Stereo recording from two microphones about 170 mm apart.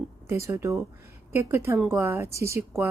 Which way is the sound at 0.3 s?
15° right (ahead or behind).